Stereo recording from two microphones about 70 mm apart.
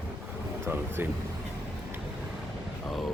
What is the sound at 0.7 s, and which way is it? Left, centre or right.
Speech, right.